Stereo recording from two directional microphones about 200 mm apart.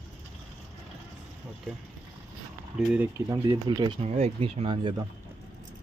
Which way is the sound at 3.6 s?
25° right (ahead or behind).